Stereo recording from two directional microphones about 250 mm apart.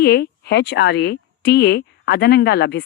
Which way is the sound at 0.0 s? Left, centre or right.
Left.